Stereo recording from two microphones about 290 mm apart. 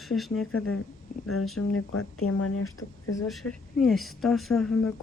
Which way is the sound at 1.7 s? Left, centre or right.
Left.